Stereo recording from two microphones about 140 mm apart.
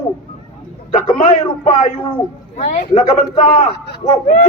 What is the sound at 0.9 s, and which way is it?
Speech, 60° left (ahead or behind).